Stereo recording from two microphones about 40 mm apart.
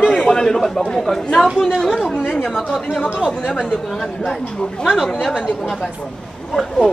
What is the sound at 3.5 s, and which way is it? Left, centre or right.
Speech, left.